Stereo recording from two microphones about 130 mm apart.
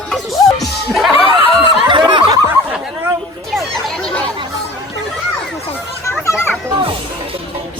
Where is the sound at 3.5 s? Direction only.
Centre (ahead or behind).